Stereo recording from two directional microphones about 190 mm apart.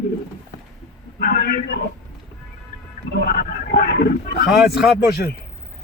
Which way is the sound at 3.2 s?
55° left (ahead or behind).